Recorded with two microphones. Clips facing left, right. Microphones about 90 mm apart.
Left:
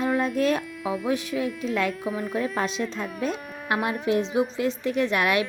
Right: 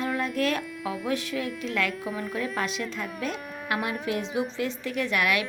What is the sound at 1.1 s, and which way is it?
Speech, 20° left (ahead or behind).